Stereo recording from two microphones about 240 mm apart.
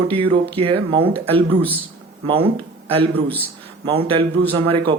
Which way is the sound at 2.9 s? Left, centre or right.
Right.